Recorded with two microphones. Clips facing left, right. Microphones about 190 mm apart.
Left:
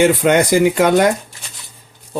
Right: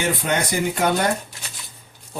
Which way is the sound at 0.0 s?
85° left.